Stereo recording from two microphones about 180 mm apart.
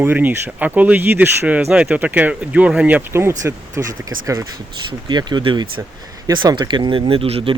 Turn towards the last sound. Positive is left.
turn(degrees=-30)  # may be behind; listen again after turning